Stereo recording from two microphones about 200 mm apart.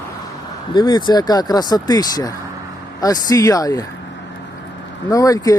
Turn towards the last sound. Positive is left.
turn(degrees=15)  # may be behind; listen again after turning